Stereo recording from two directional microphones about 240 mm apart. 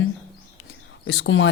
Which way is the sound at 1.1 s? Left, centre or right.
Left.